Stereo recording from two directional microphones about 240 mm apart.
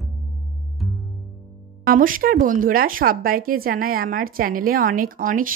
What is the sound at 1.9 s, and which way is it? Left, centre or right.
Speech, right.